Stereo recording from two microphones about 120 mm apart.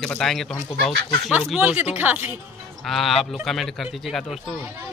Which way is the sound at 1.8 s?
15° right (ahead or behind).